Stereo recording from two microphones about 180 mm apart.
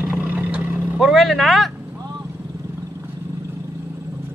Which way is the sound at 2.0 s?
15° right (ahead or behind).